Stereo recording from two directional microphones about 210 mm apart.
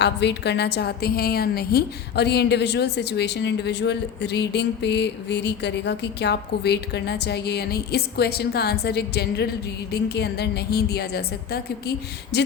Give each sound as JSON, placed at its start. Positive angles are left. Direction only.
{"t": 0.0, "sound": "a woman's voice", "side_deg": 55}